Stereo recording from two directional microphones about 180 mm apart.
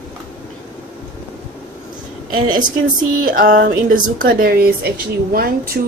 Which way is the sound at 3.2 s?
50° right (ahead or behind).